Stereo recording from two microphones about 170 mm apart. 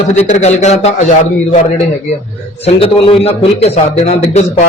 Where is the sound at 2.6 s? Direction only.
35° left (ahead or behind).